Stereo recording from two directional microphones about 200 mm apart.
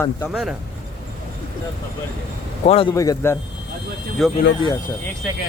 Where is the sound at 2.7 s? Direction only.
30° left (ahead or behind).